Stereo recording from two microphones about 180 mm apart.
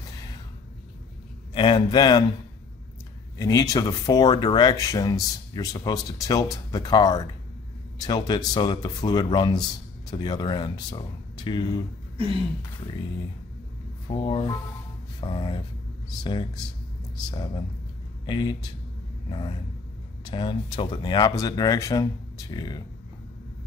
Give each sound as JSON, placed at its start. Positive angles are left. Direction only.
{"t": 1.5, "sound": "speech", "side_deg": 25}
{"t": 3.3, "sound": "speech", "side_deg": 20}
{"t": 14.2, "sound": "speech", "side_deg": 25}
{"t": 20.2, "sound": "speech", "side_deg": 25}